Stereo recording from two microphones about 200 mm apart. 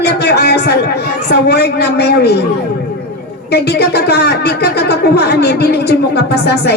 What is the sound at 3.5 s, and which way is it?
A woman's voice, 55° left (ahead or behind).